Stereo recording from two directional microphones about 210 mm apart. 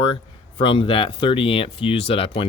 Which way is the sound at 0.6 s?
25° left (ahead or behind).